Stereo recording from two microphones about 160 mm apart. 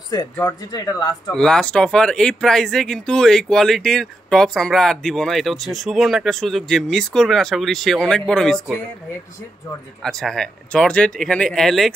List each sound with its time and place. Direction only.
0.1 s speech: 20° left (ahead or behind)
1.3 s speech: 5° left (ahead or behind)
10.0 s speech: 5° left (ahead or behind)